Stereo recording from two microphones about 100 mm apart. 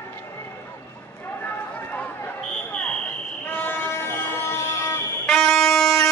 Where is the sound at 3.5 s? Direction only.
20° left (ahead or behind).